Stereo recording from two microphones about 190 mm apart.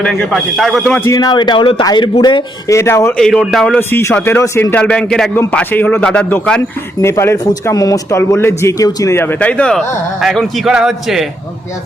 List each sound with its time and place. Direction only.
0.0 s a man's voice: 5° left (ahead or behind)
1.0 s speech: 20° left (ahead or behind); by 3.8 s centre (ahead or behind)
3.8 s speech: 10° left (ahead or behind)